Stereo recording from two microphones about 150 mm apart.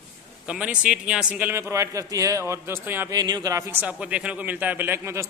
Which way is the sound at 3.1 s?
25° right (ahead or behind).